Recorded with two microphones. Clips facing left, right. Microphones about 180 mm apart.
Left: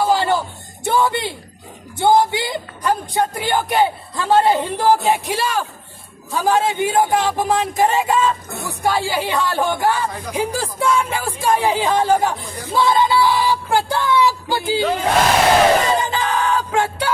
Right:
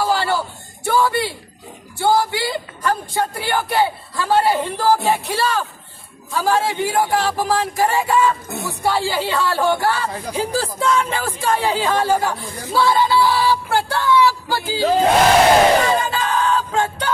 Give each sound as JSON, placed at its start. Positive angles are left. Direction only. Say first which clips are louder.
{"t": 0.0, "sound": "a sound", "louder": "left 2 dB", "side_deg": 20}
{"t": 0.8, "sound": "speech", "louder": "even", "side_deg": 20}
{"t": 15.9, "sound": "music", "louder": "even", "side_deg": 15}